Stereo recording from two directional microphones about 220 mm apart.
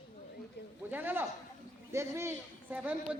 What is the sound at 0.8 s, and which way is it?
A man's voice, 10° right (ahead or behind).